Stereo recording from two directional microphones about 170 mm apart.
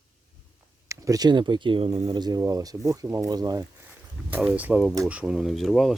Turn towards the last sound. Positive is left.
turn(degrees=0)  # may be behind; listen again after turning